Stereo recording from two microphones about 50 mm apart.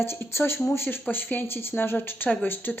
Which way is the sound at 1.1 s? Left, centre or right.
Left.